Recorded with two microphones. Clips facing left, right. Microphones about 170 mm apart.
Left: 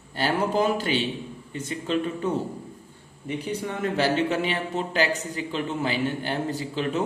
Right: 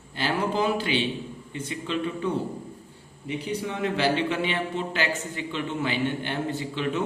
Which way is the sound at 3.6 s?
45° left (ahead or behind).